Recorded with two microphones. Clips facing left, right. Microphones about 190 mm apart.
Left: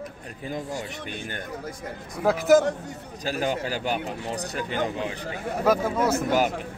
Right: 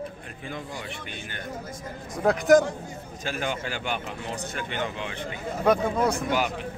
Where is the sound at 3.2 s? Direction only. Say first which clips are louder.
Left 4 dB; 40° left (ahead or behind).